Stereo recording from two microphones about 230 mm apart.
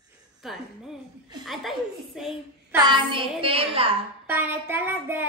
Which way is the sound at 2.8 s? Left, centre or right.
Right.